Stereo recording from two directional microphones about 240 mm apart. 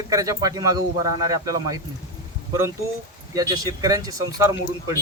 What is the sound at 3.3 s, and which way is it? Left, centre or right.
Speech, centre.